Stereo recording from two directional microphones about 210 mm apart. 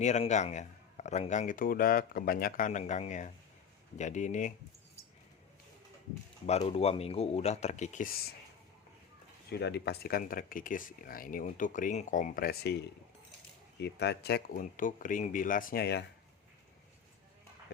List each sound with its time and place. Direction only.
0.0 s speech: 35° left (ahead or behind)
6.4 s speech: 30° left (ahead or behind)
9.5 s speech: 50° left (ahead or behind)
13.7 s speech: 55° left (ahead or behind)